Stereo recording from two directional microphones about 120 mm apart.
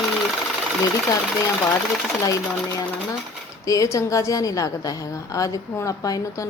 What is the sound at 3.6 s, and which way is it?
A woman's voice, 25° left (ahead or behind).